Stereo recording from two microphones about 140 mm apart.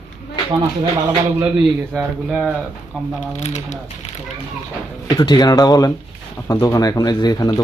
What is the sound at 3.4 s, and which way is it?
Speech, 55° left (ahead or behind).